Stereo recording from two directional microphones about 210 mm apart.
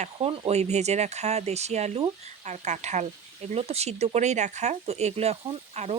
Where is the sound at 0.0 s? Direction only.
30° right (ahead or behind).